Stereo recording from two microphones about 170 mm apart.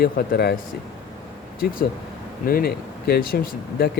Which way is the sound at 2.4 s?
60° left (ahead or behind).